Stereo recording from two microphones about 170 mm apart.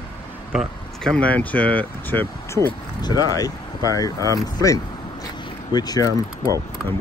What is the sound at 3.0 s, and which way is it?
Speech, 20° left (ahead or behind).